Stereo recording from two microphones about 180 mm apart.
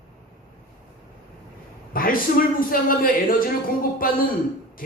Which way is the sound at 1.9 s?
50° left (ahead or behind).